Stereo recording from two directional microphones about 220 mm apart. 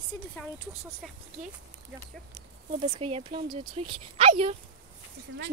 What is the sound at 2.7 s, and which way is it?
Speech, 25° right (ahead or behind).